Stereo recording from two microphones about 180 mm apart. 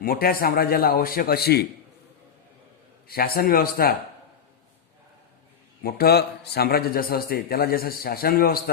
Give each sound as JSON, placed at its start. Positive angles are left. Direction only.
{"t": 0.0, "sound": "a man's voice", "side_deg": 55}
{"t": 3.1, "sound": "a man's voice", "side_deg": 55}
{"t": 5.8, "sound": "a man's voice", "side_deg": 60}